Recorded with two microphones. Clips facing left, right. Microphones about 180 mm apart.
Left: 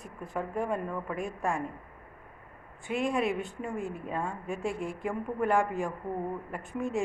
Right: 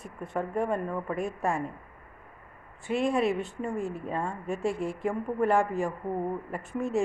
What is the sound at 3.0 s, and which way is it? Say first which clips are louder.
A man's voice: right 3 dB; centre (ahead or behind).